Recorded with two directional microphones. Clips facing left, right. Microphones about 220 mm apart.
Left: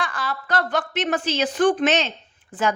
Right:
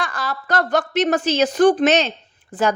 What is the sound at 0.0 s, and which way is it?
A woman's voice, 40° right (ahead or behind).